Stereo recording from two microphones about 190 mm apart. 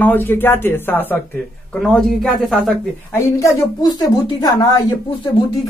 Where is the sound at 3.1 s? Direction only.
15° left (ahead or behind).